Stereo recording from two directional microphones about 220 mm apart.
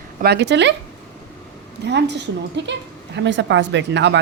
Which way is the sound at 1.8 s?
50° right (ahead or behind).